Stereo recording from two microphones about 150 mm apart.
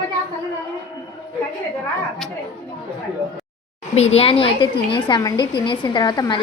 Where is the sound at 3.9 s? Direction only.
45° left (ahead or behind).